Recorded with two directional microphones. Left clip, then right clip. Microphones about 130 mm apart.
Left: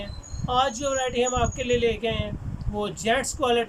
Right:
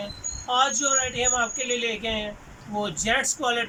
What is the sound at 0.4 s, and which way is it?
A man's voice, 40° left (ahead or behind).